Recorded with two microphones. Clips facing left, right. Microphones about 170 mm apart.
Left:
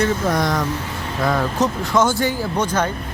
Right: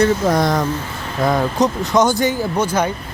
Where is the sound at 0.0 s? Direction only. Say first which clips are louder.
Right 4 dB; 35° right (ahead or behind).